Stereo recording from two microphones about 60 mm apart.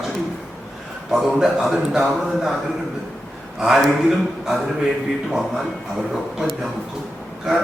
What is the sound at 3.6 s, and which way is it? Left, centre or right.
A man's voice, centre.